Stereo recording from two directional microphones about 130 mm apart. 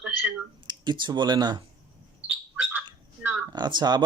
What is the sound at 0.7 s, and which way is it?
Speech, 35° right (ahead or behind).